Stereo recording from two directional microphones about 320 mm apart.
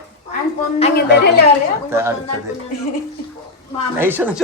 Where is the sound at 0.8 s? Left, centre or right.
Left.